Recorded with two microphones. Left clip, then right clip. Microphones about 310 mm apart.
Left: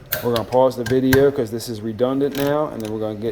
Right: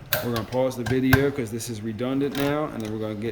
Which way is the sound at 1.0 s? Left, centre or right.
Centre.